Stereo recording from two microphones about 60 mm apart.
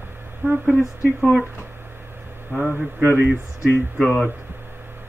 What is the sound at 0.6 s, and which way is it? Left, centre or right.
Speech, centre.